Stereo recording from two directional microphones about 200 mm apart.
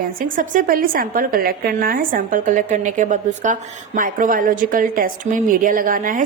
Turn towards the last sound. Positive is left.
turn(degrees=-45)  # may be behind; listen again after turning